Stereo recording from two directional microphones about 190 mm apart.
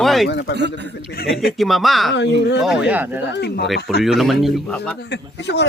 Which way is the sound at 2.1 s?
65° left (ahead or behind).